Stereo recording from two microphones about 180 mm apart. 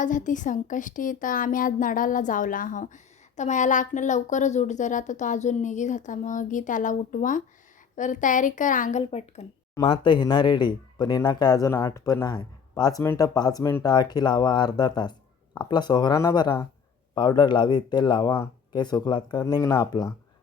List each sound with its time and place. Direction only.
0.0 s speech: 45° left (ahead or behind); by 20.1 s 20° left (ahead or behind)